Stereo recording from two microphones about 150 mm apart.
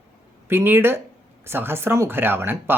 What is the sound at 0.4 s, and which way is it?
Speech, 15° right (ahead or behind).